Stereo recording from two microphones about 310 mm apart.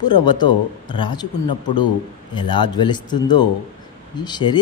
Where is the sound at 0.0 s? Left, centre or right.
Centre.